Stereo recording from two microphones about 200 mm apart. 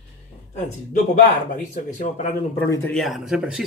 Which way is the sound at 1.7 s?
40° left (ahead or behind).